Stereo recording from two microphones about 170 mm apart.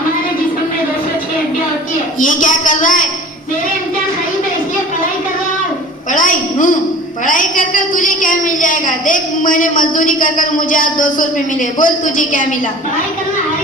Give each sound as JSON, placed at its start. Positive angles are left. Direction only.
{"t": 2.1, "sound": "a woman's voice", "side_deg": 50}
{"t": 6.1, "sound": "a sound", "side_deg": 50}
{"t": 7.3, "sound": "a woman's voice", "side_deg": 50}